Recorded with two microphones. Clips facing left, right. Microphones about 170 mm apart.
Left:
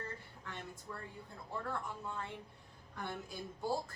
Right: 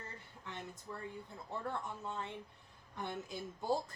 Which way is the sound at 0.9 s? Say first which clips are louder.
Right 2 dB; 20° right (ahead or behind).